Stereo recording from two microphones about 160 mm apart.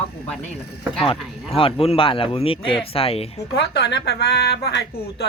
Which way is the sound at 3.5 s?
90° left.